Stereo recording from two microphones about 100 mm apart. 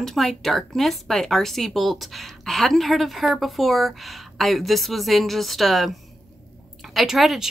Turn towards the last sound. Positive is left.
turn(degrees=0)  # may be behind; listen again after turning